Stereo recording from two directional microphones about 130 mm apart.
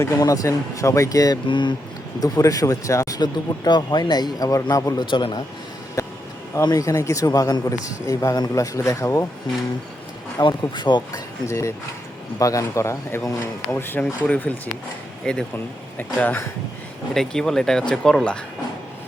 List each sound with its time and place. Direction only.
0.0 s speech: 25° left (ahead or behind)
5.1 s speech: 40° left (ahead or behind)
6.0 s a sound: 25° left (ahead or behind)
6.6 s speech: 25° left (ahead or behind)
10.6 s speech: 35° left (ahead or behind)
11.4 s speech: 20° left (ahead or behind)
17.2 s speech: 5° left (ahead or behind)